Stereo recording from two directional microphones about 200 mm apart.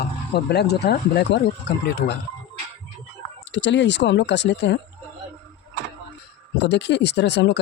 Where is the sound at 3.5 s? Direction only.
65° left (ahead or behind).